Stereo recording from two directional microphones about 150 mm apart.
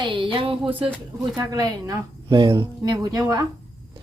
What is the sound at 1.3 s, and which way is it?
Speech, 25° right (ahead or behind).